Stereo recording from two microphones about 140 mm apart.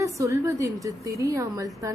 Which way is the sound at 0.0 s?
20° right (ahead or behind).